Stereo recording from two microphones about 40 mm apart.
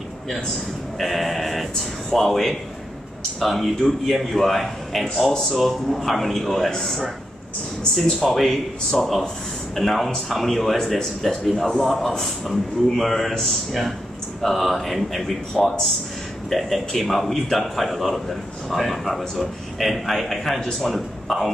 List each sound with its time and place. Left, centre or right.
0.9 s a man's voice: centre
15.6 s speech: centre
16.4 s a man's voice: centre